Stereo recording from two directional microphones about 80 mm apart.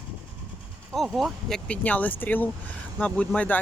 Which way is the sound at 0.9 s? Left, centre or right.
Centre.